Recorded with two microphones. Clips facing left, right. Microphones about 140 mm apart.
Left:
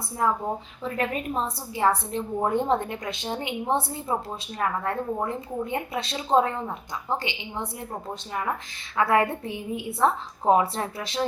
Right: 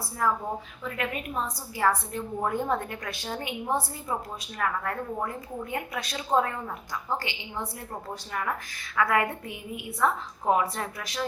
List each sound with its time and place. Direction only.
0.2 s a woman's voice: 25° left (ahead or behind)
0.9 s a woman's voice: 35° left (ahead or behind)